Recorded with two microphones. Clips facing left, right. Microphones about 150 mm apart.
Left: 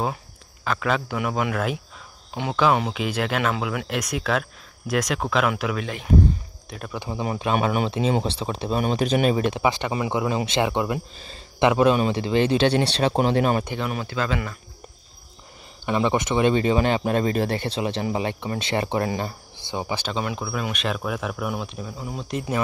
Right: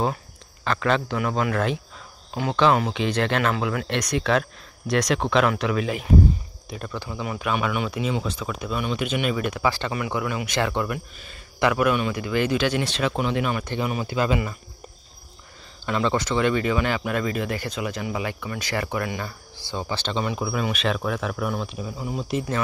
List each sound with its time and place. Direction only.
0.7 s speech: 5° left (ahead or behind)
7.1 s speech: 25° left (ahead or behind)
13.7 s speech: 5° right (ahead or behind)
15.8 s speech: 15° left (ahead or behind); by 22.4 s centre (ahead or behind)